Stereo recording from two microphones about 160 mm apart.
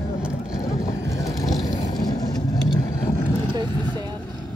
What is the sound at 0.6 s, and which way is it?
Vehicle, 20° left (ahead or behind).